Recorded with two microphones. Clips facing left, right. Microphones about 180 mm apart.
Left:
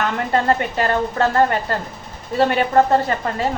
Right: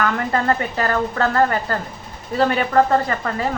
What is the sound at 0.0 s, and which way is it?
A woman's voice, 30° left (ahead or behind).